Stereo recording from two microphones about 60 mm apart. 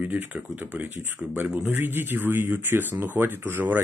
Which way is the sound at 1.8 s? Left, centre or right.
Right.